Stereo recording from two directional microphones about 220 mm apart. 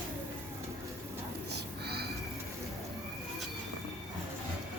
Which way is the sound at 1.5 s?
50° right (ahead or behind).